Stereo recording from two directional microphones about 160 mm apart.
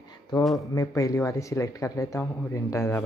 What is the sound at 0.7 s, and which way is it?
Speech, 20° left (ahead or behind).